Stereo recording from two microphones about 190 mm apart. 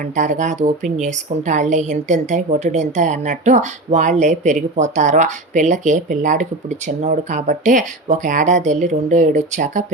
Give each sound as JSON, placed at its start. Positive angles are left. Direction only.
{"t": 0.2, "sound": "a woman's voice", "side_deg": -40}